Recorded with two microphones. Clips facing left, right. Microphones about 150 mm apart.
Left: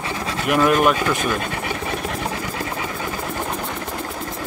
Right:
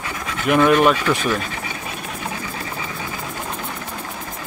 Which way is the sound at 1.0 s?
50° left (ahead or behind).